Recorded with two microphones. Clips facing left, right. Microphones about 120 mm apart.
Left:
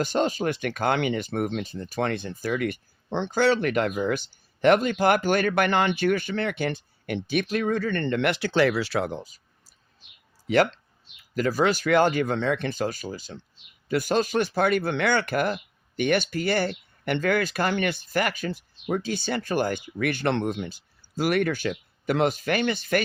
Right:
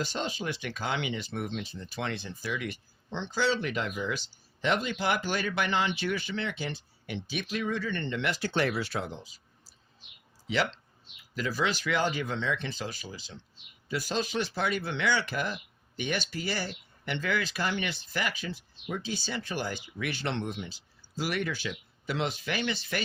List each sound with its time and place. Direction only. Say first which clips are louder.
0.0 s speech: left 9 dB; 50° left (ahead or behind); by 9.0 s 85° left
9.0 s a sound: left 9 dB; 50° left (ahead or behind)
10.4 s speech: left 8 dB; 50° left (ahead or behind)